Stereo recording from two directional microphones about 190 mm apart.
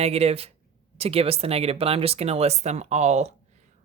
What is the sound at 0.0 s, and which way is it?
Speech, 35° right (ahead or behind).